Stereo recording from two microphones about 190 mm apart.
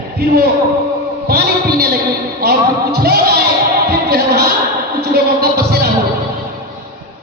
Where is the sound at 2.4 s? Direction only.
55° right (ahead or behind).